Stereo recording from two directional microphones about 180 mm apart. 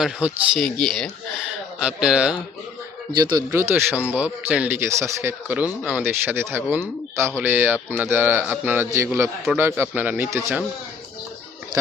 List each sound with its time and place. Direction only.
0.0 s speech: 5° right (ahead or behind)
3.1 s a man's voice: 25° right (ahead or behind)